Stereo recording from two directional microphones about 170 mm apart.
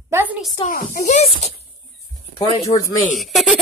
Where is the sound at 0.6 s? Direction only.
55° left (ahead or behind).